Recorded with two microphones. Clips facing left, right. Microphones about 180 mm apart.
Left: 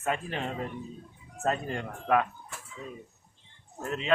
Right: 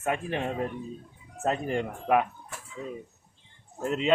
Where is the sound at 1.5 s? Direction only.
15° right (ahead or behind).